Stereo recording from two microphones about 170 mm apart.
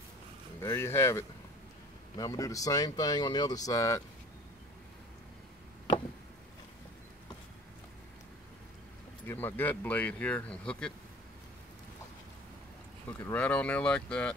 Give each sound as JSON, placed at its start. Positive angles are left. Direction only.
{"t": 0.6, "sound": "speech", "side_deg": 15}
{"t": 9.3, "sound": "speech", "side_deg": 10}
{"t": 13.2, "sound": "speech", "side_deg": 10}